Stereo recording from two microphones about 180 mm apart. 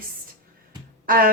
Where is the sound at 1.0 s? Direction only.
50° right (ahead or behind).